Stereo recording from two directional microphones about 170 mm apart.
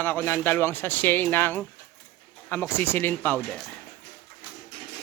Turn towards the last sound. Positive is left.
turn(degrees=10)  # may be behind; listen again after turning